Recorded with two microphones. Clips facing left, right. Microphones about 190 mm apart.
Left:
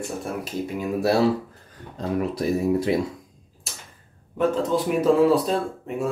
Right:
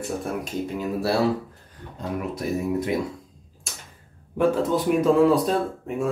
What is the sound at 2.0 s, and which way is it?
Speech, 30° left (ahead or behind).